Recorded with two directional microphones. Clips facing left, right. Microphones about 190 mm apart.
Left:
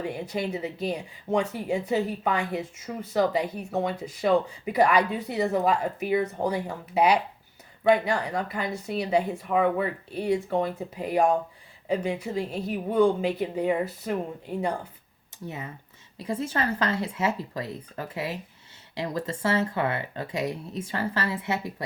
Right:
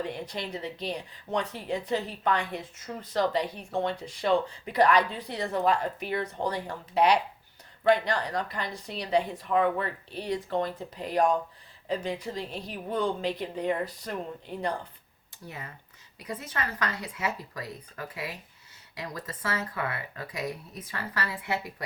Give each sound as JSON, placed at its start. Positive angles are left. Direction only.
{"t": 0.0, "sound": "speech", "side_deg": 10}
{"t": 16.1, "sound": "speech", "side_deg": 25}